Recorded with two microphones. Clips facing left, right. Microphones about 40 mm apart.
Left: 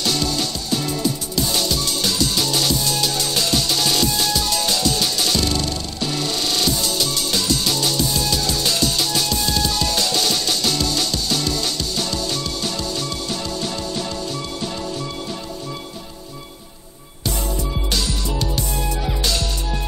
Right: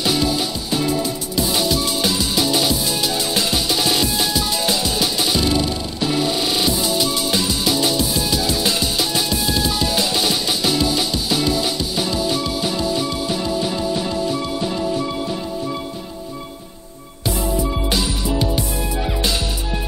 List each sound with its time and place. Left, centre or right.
0.0 s music: centre
17.6 s music: centre